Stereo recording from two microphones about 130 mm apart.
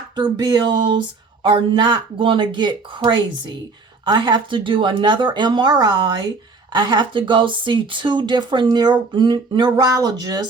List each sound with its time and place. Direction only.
0.2 s speech: 35° right (ahead or behind)